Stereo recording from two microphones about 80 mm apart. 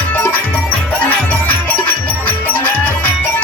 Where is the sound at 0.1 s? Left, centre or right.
Left.